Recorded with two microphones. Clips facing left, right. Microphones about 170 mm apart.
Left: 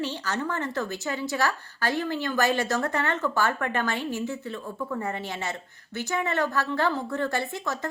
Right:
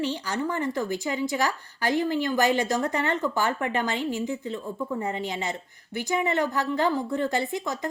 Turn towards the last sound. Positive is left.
turn(degrees=-15)  # may be behind; listen again after turning